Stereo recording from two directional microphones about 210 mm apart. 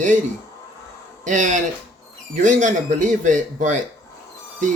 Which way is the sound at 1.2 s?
35° right (ahead or behind).